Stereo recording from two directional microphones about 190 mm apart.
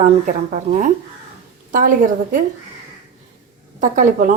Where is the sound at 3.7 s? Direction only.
40° right (ahead or behind).